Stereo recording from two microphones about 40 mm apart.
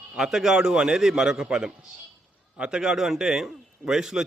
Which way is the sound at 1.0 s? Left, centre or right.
Centre.